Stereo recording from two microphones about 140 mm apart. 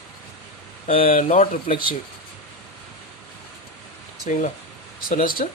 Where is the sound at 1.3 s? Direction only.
60° left (ahead or behind).